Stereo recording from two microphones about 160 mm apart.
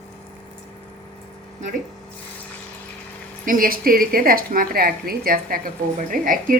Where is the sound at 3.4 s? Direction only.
60° right (ahead or behind).